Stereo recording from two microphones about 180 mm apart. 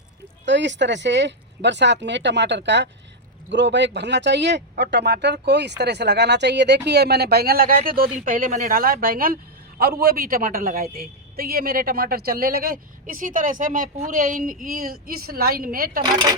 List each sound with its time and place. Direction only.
0.4 s speech: 80° right; by 16.0 s 55° right (ahead or behind)